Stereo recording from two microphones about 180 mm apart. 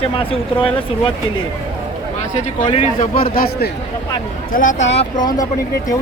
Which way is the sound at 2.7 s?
35° left (ahead or behind).